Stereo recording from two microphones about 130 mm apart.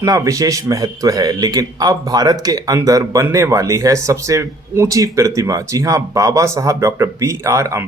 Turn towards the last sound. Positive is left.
turn(degrees=-20)  # may be behind; listen again after turning